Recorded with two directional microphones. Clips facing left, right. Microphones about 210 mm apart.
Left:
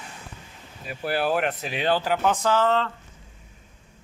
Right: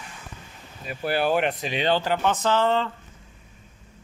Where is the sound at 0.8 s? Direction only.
Centre (ahead or behind).